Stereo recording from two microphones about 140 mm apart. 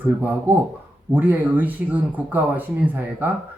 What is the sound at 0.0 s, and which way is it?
Speech, 15° right (ahead or behind).